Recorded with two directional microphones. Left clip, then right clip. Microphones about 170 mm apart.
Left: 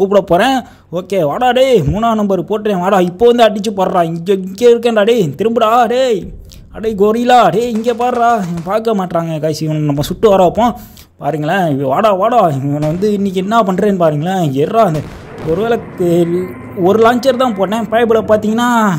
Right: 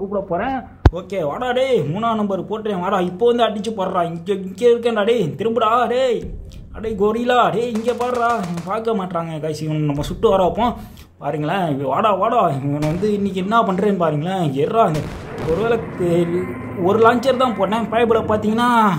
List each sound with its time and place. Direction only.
0.3 s speech: 90° left
0.6 s a man's voice: 45° left (ahead or behind)
7.7 s speech: centre (ahead or behind)
8.6 s a man's voice: 40° left (ahead or behind)
14.9 s speech: centre (ahead or behind)
16.8 s a man's voice: 30° left (ahead or behind)